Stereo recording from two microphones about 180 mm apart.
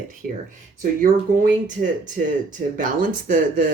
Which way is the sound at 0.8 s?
50° right (ahead or behind).